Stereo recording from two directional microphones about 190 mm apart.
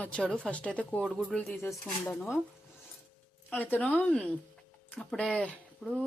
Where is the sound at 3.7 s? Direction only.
10° left (ahead or behind).